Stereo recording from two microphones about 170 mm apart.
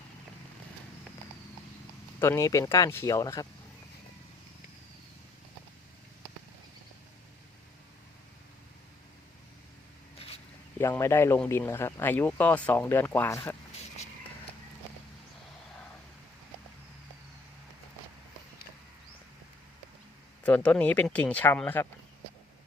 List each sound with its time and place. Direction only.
2.1 s speech: 15° left (ahead or behind)
10.2 s a sound: 35° left (ahead or behind)
10.8 s speech: 15° left (ahead or behind)
20.4 s speech: 10° left (ahead or behind)